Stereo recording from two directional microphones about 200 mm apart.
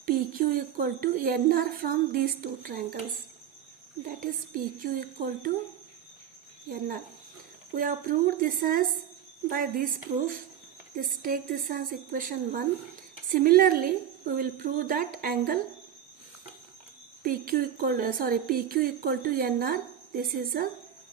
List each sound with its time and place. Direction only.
0.0 s a woman's voice: 45° right (ahead or behind)
4.2 s a woman's voice: 45° right (ahead or behind)
6.7 s a woman's voice: 45° right (ahead or behind)
10.9 s a woman's voice: 45° right (ahead or behind)
17.2 s a woman's voice: 45° right (ahead or behind)